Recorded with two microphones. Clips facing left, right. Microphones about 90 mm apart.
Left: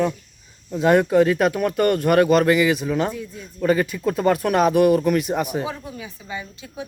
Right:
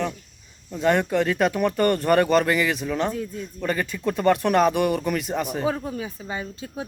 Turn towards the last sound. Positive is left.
turn(degrees=-35)  # may be behind; listen again after turning